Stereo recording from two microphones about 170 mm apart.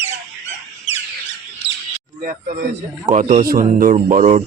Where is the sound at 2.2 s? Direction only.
50° right (ahead or behind).